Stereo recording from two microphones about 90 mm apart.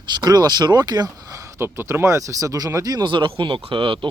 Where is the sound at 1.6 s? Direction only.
25° right (ahead or behind).